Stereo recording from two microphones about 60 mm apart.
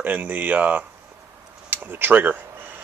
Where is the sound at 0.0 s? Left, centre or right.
Right.